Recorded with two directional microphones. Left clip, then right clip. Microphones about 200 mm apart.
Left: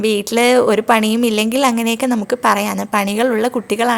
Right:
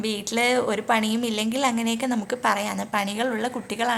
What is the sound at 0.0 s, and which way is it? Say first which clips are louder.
A woman's voice: left 9 dB; 35° left (ahead or behind).